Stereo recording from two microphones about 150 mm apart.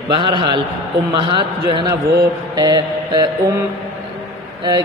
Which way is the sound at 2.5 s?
25° right (ahead or behind).